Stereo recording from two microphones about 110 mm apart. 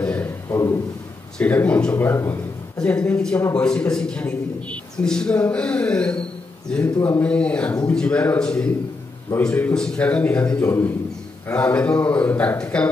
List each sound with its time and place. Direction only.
0.0 s a sound: 10° left (ahead or behind)
0.5 s speech: 30° left (ahead or behind)
1.4 s a man's voice: 15° left (ahead or behind)
2.8 s a man's voice: 10° left (ahead or behind)
6.8 s a man's voice: 20° left (ahead or behind)
10.6 s a man's voice: 20° left (ahead or behind)